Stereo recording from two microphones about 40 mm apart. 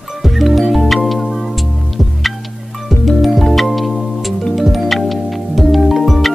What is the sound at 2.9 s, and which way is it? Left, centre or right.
Music, centre.